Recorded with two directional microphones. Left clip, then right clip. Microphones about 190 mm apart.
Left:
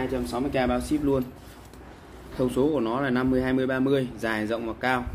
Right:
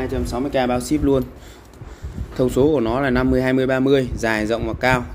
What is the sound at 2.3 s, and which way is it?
Speech, 40° right (ahead or behind).